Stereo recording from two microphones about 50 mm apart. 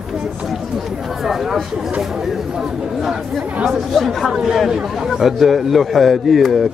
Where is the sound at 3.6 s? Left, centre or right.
Centre.